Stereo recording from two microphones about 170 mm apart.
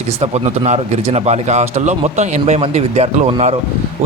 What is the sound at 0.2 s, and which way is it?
Speech, 40° right (ahead or behind).